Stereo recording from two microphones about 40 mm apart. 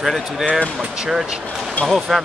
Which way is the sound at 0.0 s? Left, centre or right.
Centre.